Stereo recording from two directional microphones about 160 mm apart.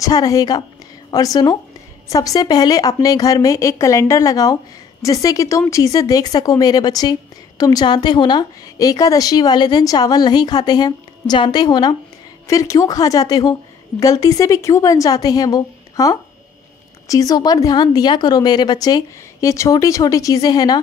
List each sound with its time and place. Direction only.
0.0 s speech: 20° left (ahead or behind)